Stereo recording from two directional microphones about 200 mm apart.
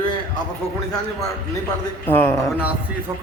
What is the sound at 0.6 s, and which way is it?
Speech, 30° left (ahead or behind).